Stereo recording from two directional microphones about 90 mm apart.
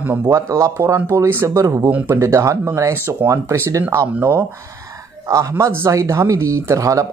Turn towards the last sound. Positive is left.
turn(degrees=-40)  # may be behind; listen again after turning